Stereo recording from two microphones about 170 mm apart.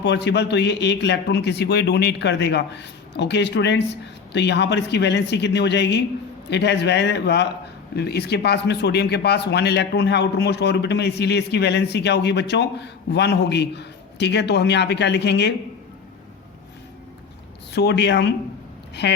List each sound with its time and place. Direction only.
0.0 s speech: 90° left
17.7 s speech: 80° left